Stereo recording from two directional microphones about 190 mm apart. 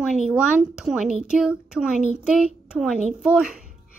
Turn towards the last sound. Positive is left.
turn(degrees=-5)  # may be behind; listen again after turning